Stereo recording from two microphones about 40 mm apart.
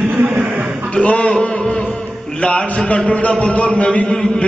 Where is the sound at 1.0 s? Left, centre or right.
Left.